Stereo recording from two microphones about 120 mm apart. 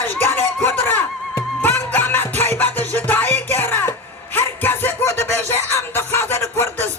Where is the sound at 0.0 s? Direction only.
15° left (ahead or behind).